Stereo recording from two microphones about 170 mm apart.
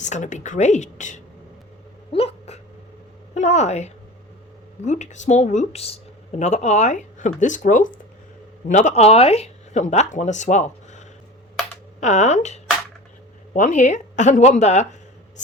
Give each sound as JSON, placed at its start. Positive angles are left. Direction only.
{"t": 0.0, "sound": "speech", "side_deg": 45}
{"t": 2.1, "sound": "a sound", "side_deg": 35}
{"t": 3.3, "sound": "a woman's voice", "side_deg": 40}